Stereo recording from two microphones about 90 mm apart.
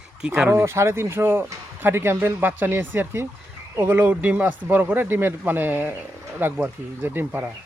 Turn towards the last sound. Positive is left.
turn(degrees=-25)  # may be behind; listen again after turning